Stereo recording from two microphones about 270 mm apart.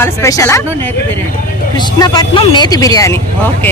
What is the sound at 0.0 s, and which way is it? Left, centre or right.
Speech, centre.